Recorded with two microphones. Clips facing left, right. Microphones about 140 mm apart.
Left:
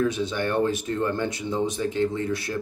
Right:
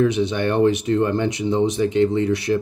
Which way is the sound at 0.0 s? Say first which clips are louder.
Right 6 dB; 20° right (ahead or behind).